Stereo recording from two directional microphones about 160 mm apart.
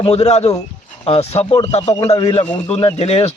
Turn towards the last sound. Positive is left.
turn(degrees=40)  # may be behind; listen again after turning